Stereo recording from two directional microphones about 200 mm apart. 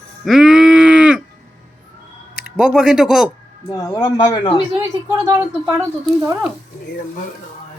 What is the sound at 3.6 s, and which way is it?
Speech, 20° left (ahead or behind).